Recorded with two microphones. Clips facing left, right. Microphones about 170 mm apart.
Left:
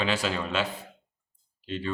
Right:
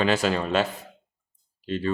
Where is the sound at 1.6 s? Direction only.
40° right (ahead or behind).